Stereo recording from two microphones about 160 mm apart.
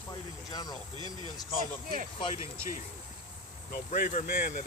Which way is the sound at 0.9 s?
30° right (ahead or behind).